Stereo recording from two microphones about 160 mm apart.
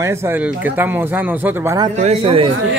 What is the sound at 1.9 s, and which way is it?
Speech, 45° right (ahead or behind).